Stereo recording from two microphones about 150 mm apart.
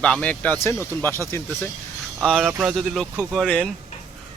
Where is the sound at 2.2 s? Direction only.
Centre (ahead or behind).